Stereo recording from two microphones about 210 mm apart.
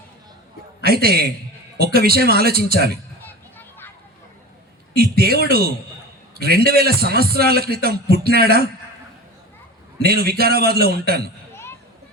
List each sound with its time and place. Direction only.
0.8 s a man's voice: 45° right (ahead or behind)
3.2 s children playing: 10° left (ahead or behind)
4.9 s a sound: 45° right (ahead or behind)
5.5 s a man's voice: 45° right (ahead or behind)
10.0 s a man's voice: 45° right (ahead or behind)